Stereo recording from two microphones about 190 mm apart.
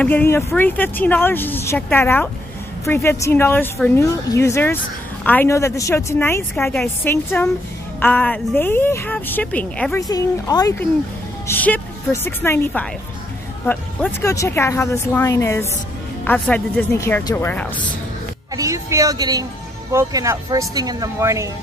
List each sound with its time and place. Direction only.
0.0 s a woman's voice: 10° left (ahead or behind)
9.9 s speech: 20° left (ahead or behind)
11.4 s a woman's voice: 10° left (ahead or behind)
18.6 s a woman's voice: 15° right (ahead or behind)